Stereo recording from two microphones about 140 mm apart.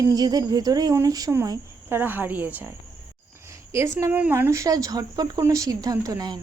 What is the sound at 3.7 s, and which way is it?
Speech, 20° right (ahead or behind).